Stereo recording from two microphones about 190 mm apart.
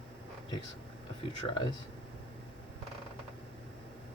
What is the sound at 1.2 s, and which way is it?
Speech, 25° left (ahead or behind).